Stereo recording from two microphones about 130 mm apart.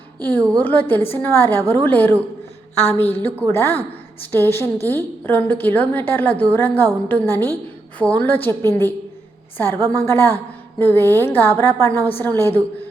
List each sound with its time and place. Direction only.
0.3 s a woman's voice: 15° left (ahead or behind)